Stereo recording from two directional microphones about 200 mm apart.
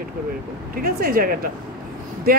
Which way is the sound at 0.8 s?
45° right (ahead or behind).